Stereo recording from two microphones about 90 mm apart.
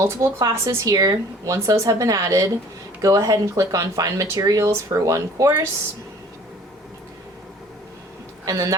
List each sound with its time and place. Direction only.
0.0 s speech: 35° right (ahead or behind)
8.4 s speech: 35° right (ahead or behind)